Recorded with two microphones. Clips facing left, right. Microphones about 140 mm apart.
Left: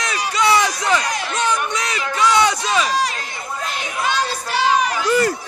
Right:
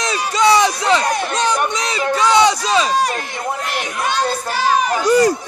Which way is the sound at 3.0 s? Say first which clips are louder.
Right 6 dB; 60° right (ahead or behind).